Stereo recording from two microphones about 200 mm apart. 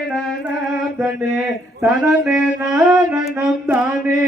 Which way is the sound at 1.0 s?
5° right (ahead or behind).